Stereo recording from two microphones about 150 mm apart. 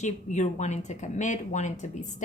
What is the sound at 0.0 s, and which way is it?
Speech, 50° left (ahead or behind).